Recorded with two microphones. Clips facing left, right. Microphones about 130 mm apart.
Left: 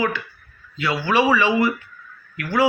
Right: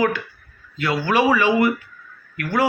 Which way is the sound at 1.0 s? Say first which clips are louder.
Even; 45° right (ahead or behind).